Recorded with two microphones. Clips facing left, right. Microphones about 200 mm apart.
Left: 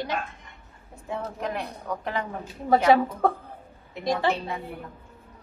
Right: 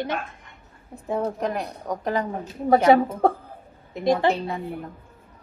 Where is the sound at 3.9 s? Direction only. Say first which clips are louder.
Right 5 dB; 55° right (ahead or behind).